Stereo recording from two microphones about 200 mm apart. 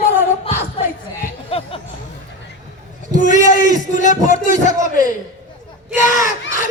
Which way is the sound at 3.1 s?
40° left (ahead or behind).